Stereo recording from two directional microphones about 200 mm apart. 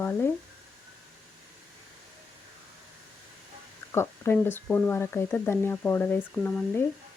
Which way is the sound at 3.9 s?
10° left (ahead or behind).